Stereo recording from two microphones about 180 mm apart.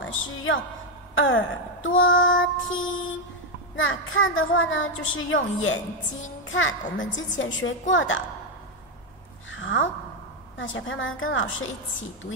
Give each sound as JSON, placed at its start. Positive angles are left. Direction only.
{"t": 0.0, "sound": "a sound", "side_deg": 90}
{"t": 1.1, "sound": "a woman's voice", "side_deg": 90}
{"t": 6.2, "sound": "music", "side_deg": 90}
{"t": 7.2, "sound": "a woman's voice", "side_deg": 90}
{"t": 9.5, "sound": "a sound", "side_deg": 90}
{"t": 10.6, "sound": "a woman's voice", "side_deg": 90}